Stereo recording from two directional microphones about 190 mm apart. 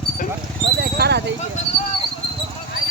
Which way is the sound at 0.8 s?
55° right (ahead or behind).